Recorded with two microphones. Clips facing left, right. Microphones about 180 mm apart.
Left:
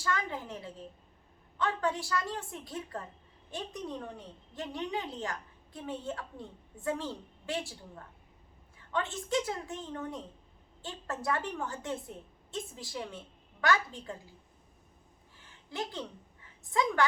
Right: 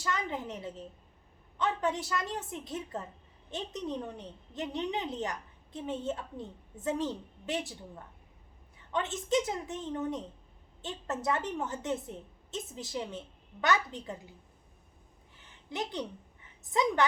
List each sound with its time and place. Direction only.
0.0 s a woman's voice: 20° right (ahead or behind)
8.9 s a woman's voice: 20° right (ahead or behind)
15.4 s a sound: 20° right (ahead or behind)